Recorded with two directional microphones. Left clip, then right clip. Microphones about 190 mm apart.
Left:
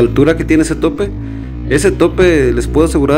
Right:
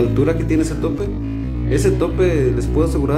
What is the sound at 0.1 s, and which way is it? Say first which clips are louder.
Speech: left 7 dB; 45° left (ahead or behind).